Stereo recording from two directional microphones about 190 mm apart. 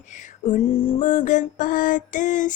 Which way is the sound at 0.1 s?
40° left (ahead or behind).